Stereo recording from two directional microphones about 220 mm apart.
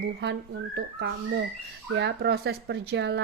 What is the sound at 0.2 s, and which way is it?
Speech, 50° right (ahead or behind).